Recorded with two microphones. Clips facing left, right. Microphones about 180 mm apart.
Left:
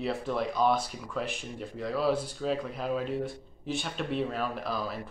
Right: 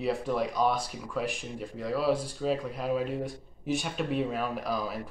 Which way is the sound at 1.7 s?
5° right (ahead or behind).